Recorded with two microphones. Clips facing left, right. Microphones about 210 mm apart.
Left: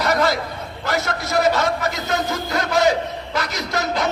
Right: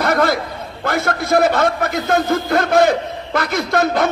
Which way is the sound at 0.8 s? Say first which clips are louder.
Right 5 dB; 55° right (ahead or behind).